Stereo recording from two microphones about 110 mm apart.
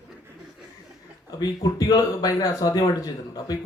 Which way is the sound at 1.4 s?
35° left (ahead or behind).